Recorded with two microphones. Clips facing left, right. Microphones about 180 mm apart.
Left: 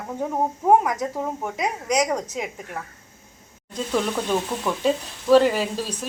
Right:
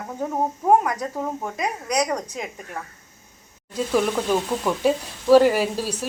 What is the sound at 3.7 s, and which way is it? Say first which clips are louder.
Speech: right 3 dB; 5° right (ahead or behind).